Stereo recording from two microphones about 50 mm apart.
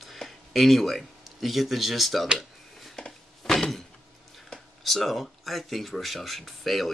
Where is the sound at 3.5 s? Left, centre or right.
Centre.